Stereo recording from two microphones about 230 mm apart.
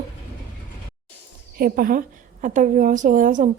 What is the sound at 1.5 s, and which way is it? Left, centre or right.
A woman's voice, right.